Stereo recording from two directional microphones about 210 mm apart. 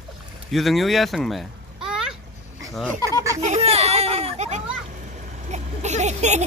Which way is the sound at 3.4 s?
30° right (ahead or behind).